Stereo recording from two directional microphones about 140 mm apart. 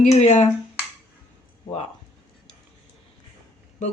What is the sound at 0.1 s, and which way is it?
Speech, 55° left (ahead or behind).